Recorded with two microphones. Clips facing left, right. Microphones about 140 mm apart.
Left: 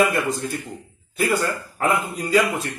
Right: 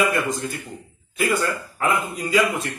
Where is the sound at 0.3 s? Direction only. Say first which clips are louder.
Left 1 dB; 40° left (ahead or behind).